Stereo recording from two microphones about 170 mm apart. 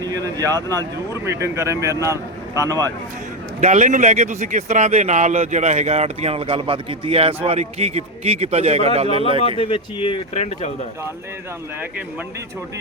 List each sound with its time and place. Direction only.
0.0 s speech: 20° right (ahead or behind)
0.7 s speech: 15° left (ahead or behind)
1.2 s speech: 15° right (ahead or behind)
3.6 s speech: 45° right (ahead or behind)
9.6 s speech: 30° left (ahead or behind)